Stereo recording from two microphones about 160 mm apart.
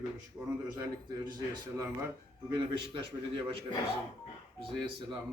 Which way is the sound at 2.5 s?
30° right (ahead or behind).